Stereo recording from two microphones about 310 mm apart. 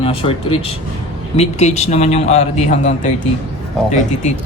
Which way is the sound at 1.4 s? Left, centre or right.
Left.